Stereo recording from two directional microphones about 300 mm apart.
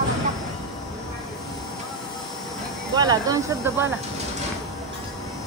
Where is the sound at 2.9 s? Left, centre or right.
Centre.